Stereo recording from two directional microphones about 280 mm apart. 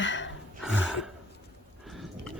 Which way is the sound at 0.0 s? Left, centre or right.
Left.